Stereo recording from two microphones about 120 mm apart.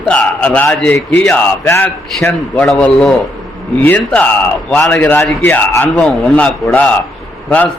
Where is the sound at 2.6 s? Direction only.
5° left (ahead or behind).